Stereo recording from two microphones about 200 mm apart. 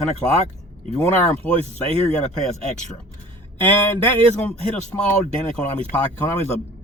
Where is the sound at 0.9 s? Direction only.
5° left (ahead or behind).